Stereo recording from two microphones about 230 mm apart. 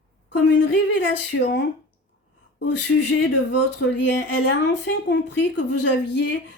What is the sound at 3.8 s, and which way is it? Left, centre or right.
A woman's voice, left.